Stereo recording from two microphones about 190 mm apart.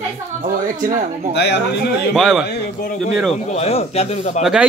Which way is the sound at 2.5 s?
55° left (ahead or behind).